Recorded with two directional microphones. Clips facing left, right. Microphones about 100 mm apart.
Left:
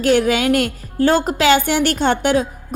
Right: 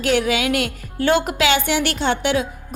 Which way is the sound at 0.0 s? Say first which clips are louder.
Left 4 dB; 40° left (ahead or behind).